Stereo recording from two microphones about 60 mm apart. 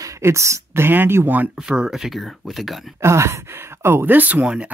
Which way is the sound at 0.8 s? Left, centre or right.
Right.